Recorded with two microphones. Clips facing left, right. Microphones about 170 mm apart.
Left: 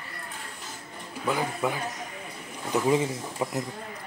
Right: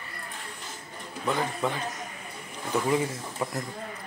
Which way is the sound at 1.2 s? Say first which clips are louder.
Left 1 dB; 5° left (ahead or behind).